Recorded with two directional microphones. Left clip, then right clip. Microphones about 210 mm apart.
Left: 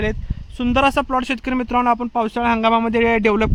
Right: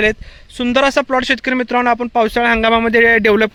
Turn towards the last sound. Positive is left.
turn(degrees=-5)  # may be behind; listen again after turning